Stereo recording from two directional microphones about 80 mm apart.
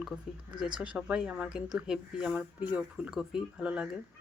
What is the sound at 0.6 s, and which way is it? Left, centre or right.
Speech, centre.